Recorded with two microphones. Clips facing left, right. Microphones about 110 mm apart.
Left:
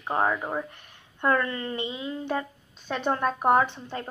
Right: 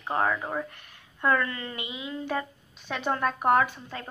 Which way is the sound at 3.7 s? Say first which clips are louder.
Left 4 dB; 30° left (ahead or behind).